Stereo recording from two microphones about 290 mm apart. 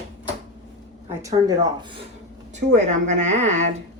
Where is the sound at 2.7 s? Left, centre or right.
Right.